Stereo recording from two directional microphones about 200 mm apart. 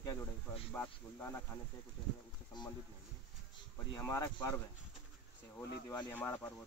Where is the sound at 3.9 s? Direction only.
15° left (ahead or behind).